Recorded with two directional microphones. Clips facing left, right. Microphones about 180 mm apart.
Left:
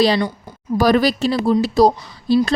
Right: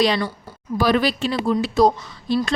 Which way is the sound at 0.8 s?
40° left (ahead or behind).